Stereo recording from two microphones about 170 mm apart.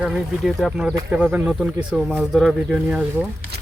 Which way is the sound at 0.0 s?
Centre (ahead or behind).